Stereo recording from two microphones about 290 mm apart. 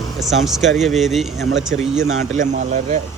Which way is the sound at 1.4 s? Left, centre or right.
Right.